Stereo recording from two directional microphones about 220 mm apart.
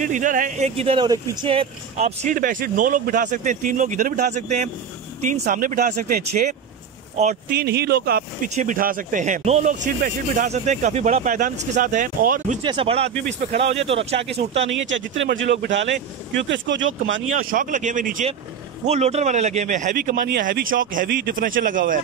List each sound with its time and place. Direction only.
0.0 s speech: 35° right (ahead or behind)
12.6 s speech: 25° right (ahead or behind)
14.9 s speech: 55° right (ahead or behind)
17.3 s speech: 40° right (ahead or behind)